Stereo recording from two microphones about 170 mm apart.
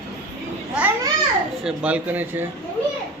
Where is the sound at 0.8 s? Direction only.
5° right (ahead or behind).